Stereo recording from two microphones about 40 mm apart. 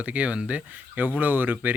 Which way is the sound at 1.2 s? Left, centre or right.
Right.